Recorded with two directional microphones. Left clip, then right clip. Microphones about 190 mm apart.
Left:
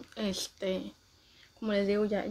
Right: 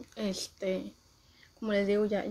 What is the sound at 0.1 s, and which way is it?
Speech, 5° right (ahead or behind).